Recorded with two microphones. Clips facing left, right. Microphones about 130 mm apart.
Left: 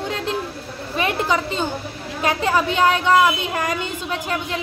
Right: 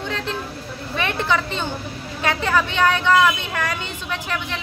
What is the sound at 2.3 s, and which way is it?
Speech, 20° left (ahead or behind).